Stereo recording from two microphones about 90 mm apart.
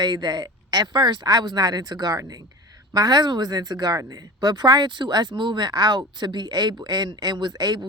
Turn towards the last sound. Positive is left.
turn(degrees=-50)  # may be behind; listen again after turning